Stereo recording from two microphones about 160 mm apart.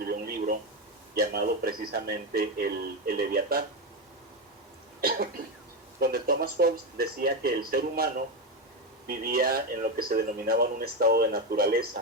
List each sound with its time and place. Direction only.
0.0 s a sound: 70° right (ahead or behind)
1.1 s speech: 70° right (ahead or behind)
4.9 s cough: 70° right (ahead or behind)
6.0 s speech: 65° right (ahead or behind)